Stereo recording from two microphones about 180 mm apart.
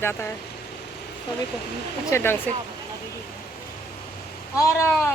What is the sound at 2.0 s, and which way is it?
Speech, 15° left (ahead or behind).